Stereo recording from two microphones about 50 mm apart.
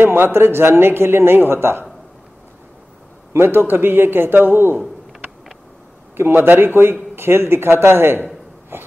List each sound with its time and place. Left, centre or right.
0.0 s speech: right
3.3 s speech: right
6.1 s a man's voice: right